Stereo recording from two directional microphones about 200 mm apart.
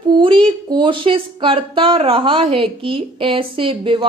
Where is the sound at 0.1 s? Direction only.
25° right (ahead or behind).